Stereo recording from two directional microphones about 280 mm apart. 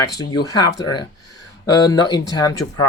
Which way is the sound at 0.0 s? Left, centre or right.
Centre.